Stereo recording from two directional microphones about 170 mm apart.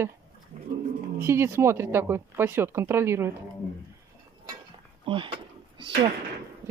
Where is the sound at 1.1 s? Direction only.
15° right (ahead or behind).